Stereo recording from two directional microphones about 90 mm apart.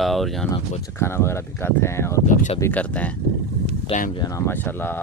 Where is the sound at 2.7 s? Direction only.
15° left (ahead or behind).